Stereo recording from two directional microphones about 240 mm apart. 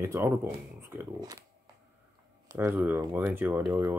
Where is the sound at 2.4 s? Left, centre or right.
Centre.